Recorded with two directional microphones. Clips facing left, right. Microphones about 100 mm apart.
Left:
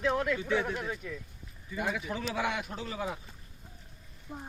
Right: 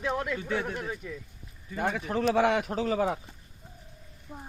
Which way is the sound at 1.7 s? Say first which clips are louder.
Right 4 dB; 45° right (ahead or behind).